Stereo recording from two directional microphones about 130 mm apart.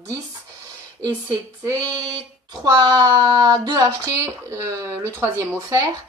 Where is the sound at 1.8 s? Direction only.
30° right (ahead or behind).